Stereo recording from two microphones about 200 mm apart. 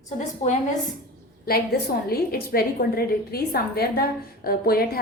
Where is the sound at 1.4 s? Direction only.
50° left (ahead or behind).